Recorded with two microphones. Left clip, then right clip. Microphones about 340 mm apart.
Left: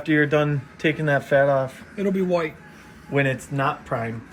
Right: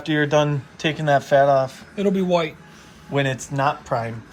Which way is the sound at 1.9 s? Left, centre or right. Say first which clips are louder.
Right 3 dB; right.